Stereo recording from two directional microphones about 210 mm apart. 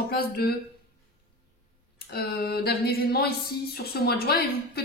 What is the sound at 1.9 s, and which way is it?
Speech, 45° left (ahead or behind).